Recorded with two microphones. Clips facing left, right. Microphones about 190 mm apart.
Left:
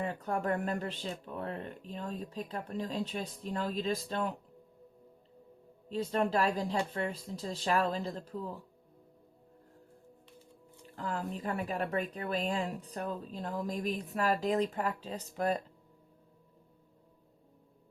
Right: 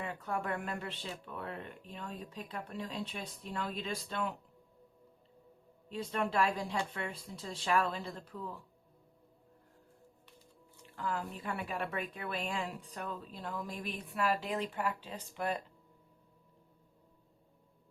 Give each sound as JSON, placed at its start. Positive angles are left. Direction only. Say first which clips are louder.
{"t": 0.0, "sound": "speech", "louder": "left 4 dB", "side_deg": 40}
{"t": 5.9, "sound": "speech", "louder": "left 4 dB", "side_deg": 35}
{"t": 10.9, "sound": "speech", "louder": "left 2 dB", "side_deg": 40}